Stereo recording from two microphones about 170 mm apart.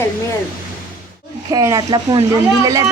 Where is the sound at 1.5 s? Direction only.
20° right (ahead or behind).